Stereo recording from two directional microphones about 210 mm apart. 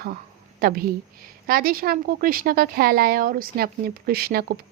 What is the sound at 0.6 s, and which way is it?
Speech, 45° right (ahead or behind).